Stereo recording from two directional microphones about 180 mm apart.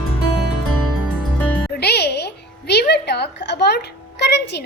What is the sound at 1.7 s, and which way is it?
A woman's voice, 65° left (ahead or behind).